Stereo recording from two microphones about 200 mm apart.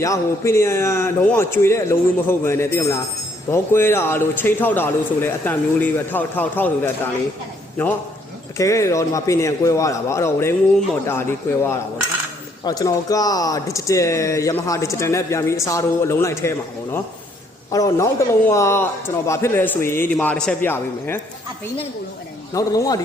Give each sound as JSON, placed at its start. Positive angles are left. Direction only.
{"t": 0.0, "sound": "speech", "side_deg": 15}
{"t": 22.5, "sound": "speech", "side_deg": 15}